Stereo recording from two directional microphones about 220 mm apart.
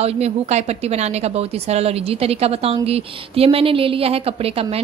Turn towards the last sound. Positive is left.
turn(degrees=-25)  # may be behind; listen again after turning